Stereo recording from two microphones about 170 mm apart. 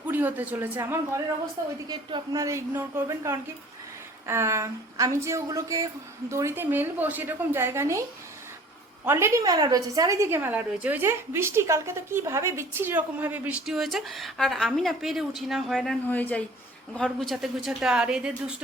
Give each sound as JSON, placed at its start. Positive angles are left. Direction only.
{"t": 0.0, "sound": "a woman's voice", "side_deg": -10}
{"t": 1.9, "sound": "a woman's voice", "side_deg": -25}
{"t": 9.0, "sound": "a woman's voice", "side_deg": -15}